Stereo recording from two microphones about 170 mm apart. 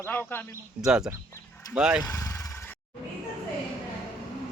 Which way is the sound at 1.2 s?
15° left (ahead or behind).